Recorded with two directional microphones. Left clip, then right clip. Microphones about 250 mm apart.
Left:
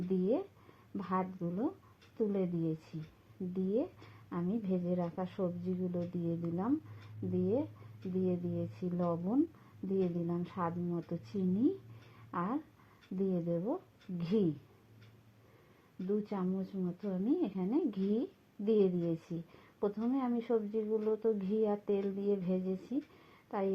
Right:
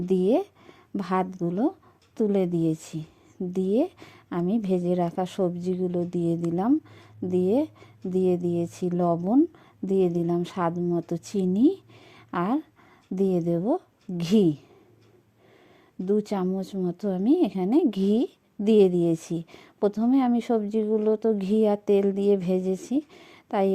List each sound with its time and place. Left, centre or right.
0.1 s a woman's voice: right
16.0 s a woman's voice: right